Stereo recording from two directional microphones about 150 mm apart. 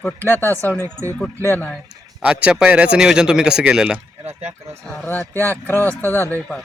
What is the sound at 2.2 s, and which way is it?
Speech, 10° right (ahead or behind).